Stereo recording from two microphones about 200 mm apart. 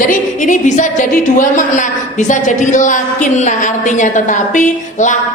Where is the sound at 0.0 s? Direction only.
40° left (ahead or behind).